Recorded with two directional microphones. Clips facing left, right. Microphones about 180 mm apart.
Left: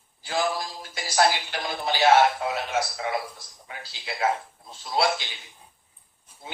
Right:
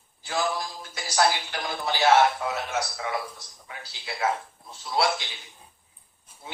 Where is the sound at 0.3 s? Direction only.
25° left (ahead or behind).